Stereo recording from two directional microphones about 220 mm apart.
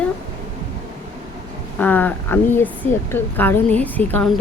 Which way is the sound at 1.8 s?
10° left (ahead or behind).